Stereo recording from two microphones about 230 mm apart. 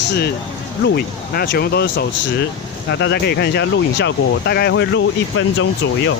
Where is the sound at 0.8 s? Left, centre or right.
Left.